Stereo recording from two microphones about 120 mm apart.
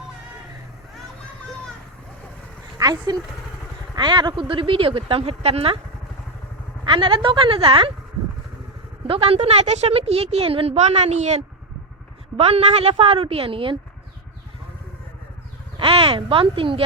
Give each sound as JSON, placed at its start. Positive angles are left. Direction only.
{"t": 2.7, "sound": "speech", "side_deg": -30}
{"t": 6.8, "sound": "speech", "side_deg": -45}
{"t": 9.0, "sound": "a woman's voice", "side_deg": -50}
{"t": 12.4, "sound": "speech", "side_deg": -55}
{"t": 15.8, "sound": "speech", "side_deg": -50}